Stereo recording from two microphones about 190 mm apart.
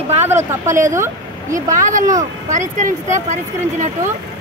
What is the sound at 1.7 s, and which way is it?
Speech, 45° right (ahead or behind).